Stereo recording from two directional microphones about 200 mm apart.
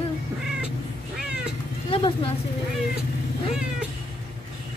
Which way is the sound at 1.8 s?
25° left (ahead or behind).